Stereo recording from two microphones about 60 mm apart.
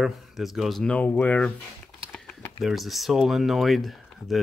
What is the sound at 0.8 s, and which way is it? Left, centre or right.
Speech, left.